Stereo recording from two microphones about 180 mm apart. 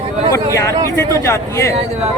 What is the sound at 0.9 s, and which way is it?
Speech, 15° left (ahead or behind).